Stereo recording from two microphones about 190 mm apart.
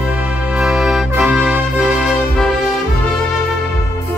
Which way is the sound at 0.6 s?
5° right (ahead or behind).